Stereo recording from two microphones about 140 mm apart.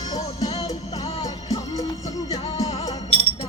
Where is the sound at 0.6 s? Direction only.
25° left (ahead or behind).